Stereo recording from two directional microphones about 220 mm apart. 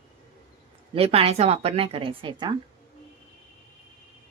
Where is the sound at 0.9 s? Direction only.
25° right (ahead or behind).